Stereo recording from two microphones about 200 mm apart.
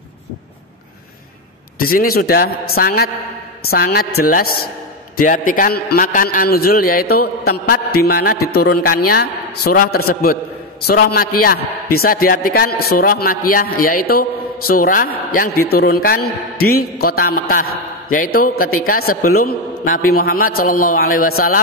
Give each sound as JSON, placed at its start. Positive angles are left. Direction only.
{"t": 1.8, "sound": "a man's voice", "side_deg": 45}